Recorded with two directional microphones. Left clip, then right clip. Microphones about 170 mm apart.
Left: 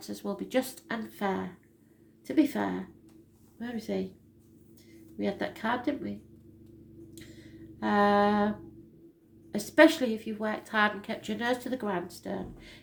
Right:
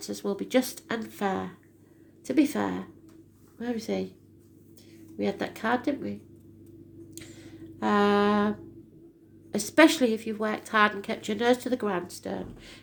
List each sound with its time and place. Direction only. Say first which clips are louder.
0.0 s a woman's voice: right 5 dB; 35° right (ahead or behind)
5.1 s speech: right 2 dB; 40° right (ahead or behind)
7.1 s a sound: right 5 dB; 45° right (ahead or behind)
9.5 s a woman's voice: right 1 dB; 45° right (ahead or behind)